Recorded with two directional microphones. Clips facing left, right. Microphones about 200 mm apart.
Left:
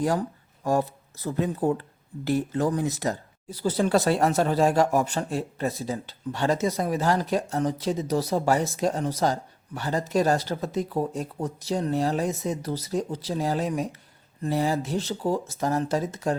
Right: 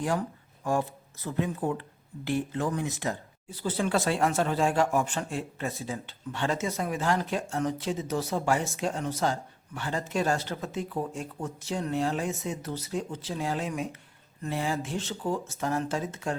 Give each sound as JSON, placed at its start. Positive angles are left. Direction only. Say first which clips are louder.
{"t": 0.0, "sound": "speech", "louder": "left 4 dB", "side_deg": 40}